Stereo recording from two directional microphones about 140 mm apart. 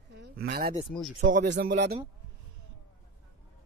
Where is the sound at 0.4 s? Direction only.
90° right.